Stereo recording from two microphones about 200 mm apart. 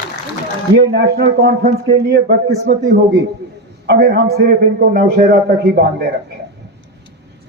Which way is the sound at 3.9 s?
55° right (ahead or behind).